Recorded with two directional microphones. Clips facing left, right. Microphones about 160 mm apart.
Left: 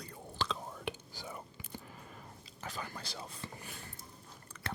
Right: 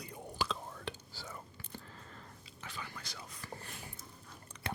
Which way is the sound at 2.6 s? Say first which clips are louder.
Left 4 dB; 40° left (ahead or behind).